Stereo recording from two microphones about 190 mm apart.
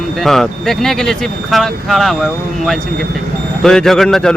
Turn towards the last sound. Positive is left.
turn(degrees=5)  # may be behind; listen again after turning